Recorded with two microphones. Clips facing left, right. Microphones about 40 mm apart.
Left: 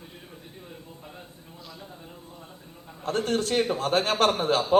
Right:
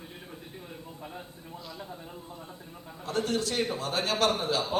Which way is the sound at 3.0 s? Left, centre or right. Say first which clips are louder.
Left 3 dB; left.